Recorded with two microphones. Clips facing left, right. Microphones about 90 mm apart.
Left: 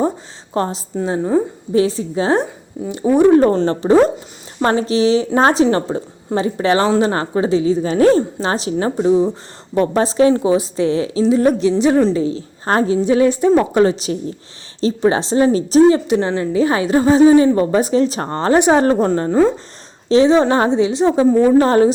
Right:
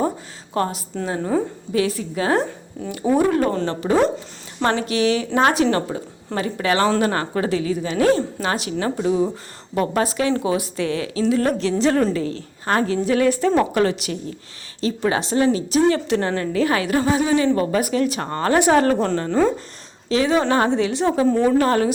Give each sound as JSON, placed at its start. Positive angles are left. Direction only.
{"t": 0.5, "sound": "a woman's voice", "side_deg": 25}
{"t": 12.6, "sound": "a woman's voice", "side_deg": 30}
{"t": 12.9, "sound": "a woman's voice", "side_deg": 20}
{"t": 15.9, "sound": "a woman's voice", "side_deg": 20}
{"t": 21.6, "sound": "a woman's voice", "side_deg": 30}